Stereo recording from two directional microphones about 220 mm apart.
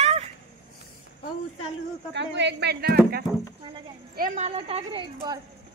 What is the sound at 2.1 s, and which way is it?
Speech, 50° right (ahead or behind).